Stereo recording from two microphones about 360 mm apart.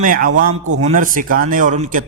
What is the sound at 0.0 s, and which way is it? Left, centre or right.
A man's voice, right.